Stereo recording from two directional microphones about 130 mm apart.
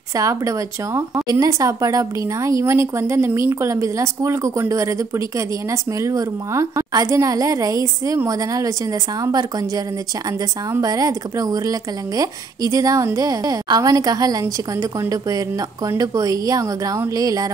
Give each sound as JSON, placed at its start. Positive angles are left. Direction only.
{"t": 0.1, "sound": "a woman's voice", "side_deg": -25}
{"t": 10.7, "sound": "a woman's voice", "side_deg": -30}